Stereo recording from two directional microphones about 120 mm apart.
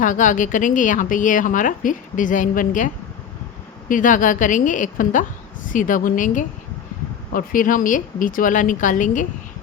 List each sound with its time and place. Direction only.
0.0 s a woman's voice: 90° left
7.8 s a woman's voice: 90° left